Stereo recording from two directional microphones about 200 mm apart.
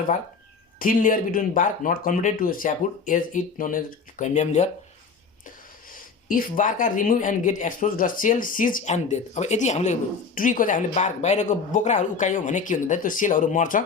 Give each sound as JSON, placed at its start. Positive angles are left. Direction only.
{"t": 0.8, "sound": "speech", "side_deg": 45}
{"t": 6.2, "sound": "speech", "side_deg": 40}